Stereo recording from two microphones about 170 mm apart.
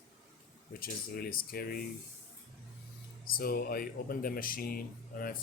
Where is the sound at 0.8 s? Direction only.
60° left (ahead or behind).